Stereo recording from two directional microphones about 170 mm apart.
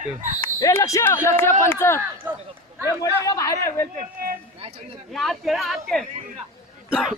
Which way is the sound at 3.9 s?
55° right (ahead or behind).